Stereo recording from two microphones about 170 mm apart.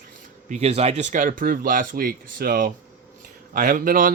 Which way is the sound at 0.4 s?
40° right (ahead or behind).